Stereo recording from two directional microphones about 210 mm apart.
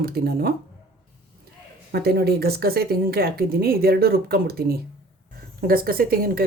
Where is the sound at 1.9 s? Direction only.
45° right (ahead or behind).